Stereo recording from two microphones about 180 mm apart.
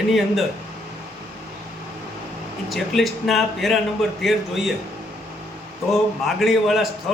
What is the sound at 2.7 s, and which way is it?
A man's voice, centre (ahead or behind).